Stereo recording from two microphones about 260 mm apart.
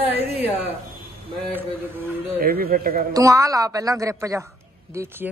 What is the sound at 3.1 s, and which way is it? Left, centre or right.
A woman's voice, centre.